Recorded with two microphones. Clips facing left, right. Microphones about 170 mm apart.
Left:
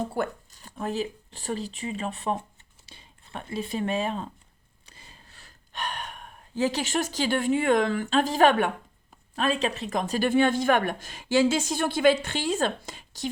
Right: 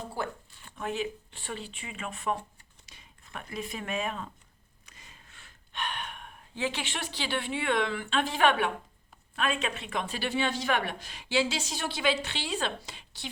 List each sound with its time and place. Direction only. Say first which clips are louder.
0.0 s speech: left 7 dB; 45° left (ahead or behind)
4.9 s gasp: left 3 dB; 30° left (ahead or behind)
9.3 s speech: left 5 dB; 35° left (ahead or behind)